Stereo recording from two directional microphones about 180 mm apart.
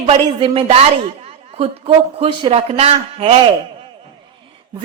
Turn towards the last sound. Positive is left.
turn(degrees=-30)  # may be behind; listen again after turning